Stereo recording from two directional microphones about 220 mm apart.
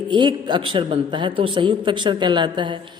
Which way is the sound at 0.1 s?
20° right (ahead or behind).